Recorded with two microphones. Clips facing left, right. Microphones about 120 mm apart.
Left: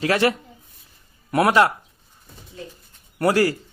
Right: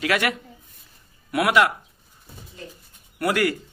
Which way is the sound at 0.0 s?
35° left (ahead or behind).